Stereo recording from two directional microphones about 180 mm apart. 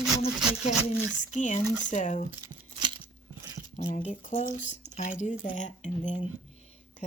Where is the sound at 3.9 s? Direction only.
40° left (ahead or behind).